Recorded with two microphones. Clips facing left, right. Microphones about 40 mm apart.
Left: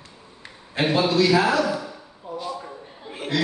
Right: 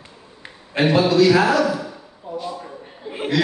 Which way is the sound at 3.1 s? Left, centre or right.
Right.